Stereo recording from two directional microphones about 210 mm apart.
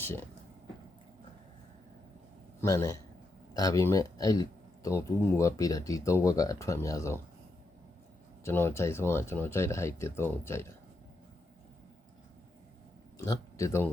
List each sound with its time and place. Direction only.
0.0 s speech: 10° left (ahead or behind)
2.6 s speech: 15° left (ahead or behind)
8.4 s speech: 10° left (ahead or behind)
13.1 s speech: 15° left (ahead or behind)